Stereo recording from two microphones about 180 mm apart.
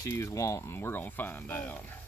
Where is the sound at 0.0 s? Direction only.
15° left (ahead or behind).